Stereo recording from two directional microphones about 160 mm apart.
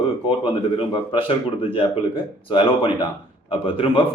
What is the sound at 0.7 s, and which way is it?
Speech, 35° left (ahead or behind).